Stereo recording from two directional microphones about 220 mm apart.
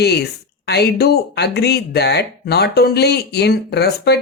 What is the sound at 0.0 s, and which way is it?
Speech, 50° left (ahead or behind).